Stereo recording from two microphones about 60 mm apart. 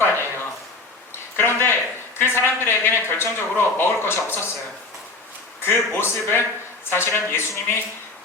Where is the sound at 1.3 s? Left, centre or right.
Left.